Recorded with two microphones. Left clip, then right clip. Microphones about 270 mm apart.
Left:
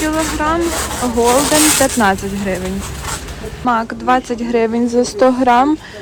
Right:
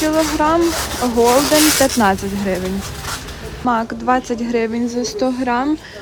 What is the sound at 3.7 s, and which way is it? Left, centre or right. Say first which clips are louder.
Speech: left 2 dB; centre.